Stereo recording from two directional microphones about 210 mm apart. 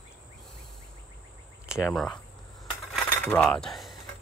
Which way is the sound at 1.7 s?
Centre (ahead or behind).